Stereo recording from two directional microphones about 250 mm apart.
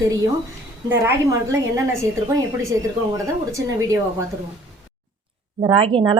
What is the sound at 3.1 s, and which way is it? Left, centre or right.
Speech, centre.